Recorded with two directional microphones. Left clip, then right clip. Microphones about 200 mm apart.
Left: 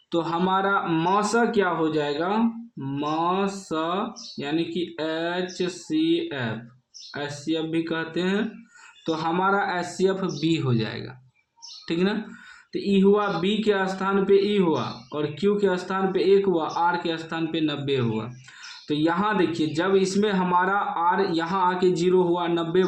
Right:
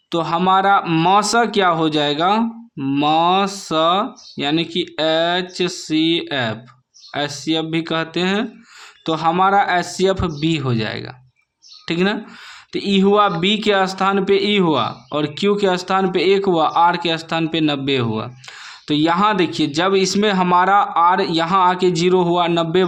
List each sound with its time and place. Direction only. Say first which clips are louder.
0.1 s speech: right 8 dB; 40° right (ahead or behind)